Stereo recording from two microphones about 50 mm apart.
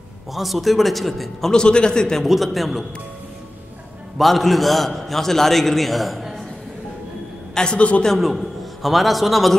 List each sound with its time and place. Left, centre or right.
0.3 s a man's voice: centre
1.5 s a man's voice: centre
2.2 s a man's voice: centre
4.2 s a man's voice: centre
7.5 s a man's voice: centre
8.2 s a man's voice: centre